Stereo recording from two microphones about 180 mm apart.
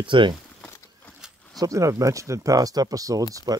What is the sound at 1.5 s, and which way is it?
Speech, 15° right (ahead or behind).